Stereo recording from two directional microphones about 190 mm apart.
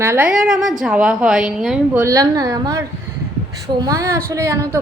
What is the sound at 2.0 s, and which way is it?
A woman's voice, 15° right (ahead or behind).